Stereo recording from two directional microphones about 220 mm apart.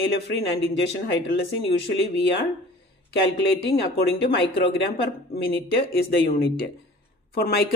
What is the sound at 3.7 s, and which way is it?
Speech, 45° left (ahead or behind).